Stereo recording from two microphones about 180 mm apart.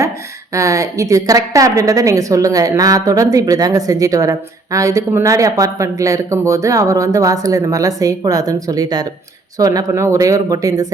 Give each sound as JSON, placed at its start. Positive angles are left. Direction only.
{"t": 0.5, "sound": "a woman's voice", "side_deg": -15}